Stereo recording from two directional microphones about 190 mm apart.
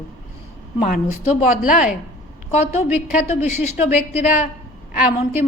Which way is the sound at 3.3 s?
35° left (ahead or behind).